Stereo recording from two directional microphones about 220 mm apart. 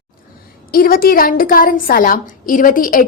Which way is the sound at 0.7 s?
40° left (ahead or behind).